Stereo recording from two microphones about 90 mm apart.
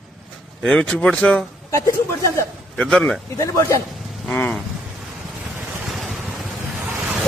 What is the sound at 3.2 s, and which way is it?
Speech, 35° left (ahead or behind).